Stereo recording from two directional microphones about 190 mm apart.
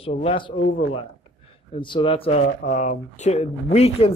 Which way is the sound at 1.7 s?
25° left (ahead or behind).